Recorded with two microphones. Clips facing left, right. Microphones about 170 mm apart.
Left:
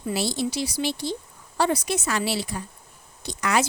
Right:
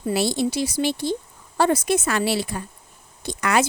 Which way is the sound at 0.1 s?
55° right (ahead or behind).